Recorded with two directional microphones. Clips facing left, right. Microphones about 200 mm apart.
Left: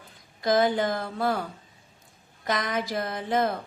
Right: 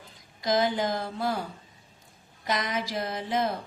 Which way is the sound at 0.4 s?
55° left (ahead or behind).